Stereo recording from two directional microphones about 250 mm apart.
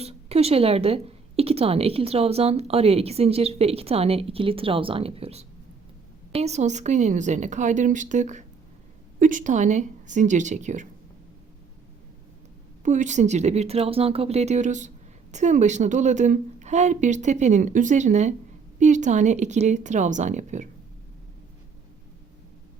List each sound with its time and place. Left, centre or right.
0.0 s a woman's voice: right
12.8 s a woman's voice: right